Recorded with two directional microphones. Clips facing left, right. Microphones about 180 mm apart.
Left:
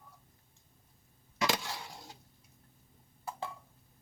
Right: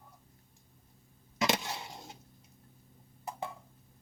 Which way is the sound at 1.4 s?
20° right (ahead or behind).